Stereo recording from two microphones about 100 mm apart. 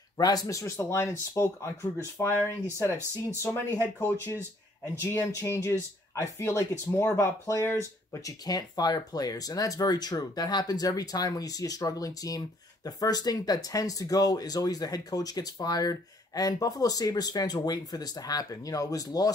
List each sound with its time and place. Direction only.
0.2 s speech: 40° left (ahead or behind); by 4.4 s 25° left (ahead or behind)
5.5 s speech: 25° left (ahead or behind)